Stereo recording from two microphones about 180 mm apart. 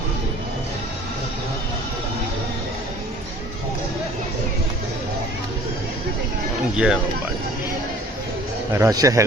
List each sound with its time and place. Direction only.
6.7 s speech: 5° right (ahead or behind)
8.7 s a man's voice: 20° right (ahead or behind)